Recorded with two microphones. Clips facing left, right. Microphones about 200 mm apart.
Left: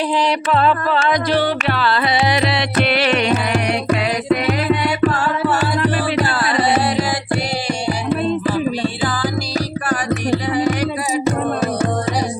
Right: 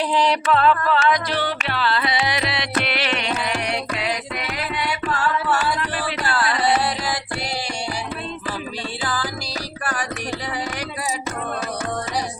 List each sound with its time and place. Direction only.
0.5 s music: 15° left (ahead or behind)
1.4 s carnatic music: 40° left (ahead or behind)
11.3 s music: 30° left (ahead or behind)